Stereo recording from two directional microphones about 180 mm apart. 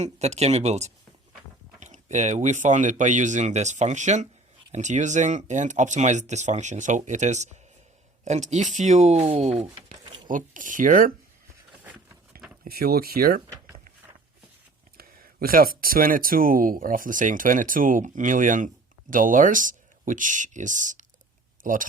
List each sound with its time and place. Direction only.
0.0 s speech: 40° right (ahead or behind)
10.2 s speech: 45° right (ahead or behind)
12.6 s speech: 55° right (ahead or behind)
14.9 s speech: 55° right (ahead or behind)